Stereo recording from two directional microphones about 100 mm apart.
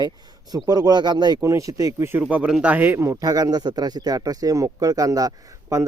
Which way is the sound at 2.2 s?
10° right (ahead or behind).